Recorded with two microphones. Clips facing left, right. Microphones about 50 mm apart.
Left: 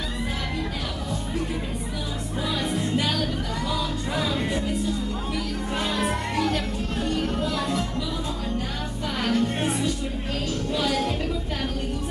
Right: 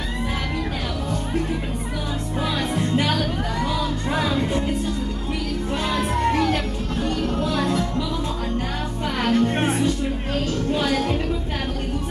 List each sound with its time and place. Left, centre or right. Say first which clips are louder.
2.7 s music: right 5 dB; right
6.3 s music: right 3 dB; right
9.2 s music: right 4 dB; right